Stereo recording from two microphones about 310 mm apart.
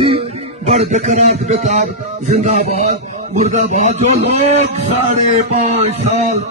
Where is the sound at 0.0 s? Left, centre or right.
Centre.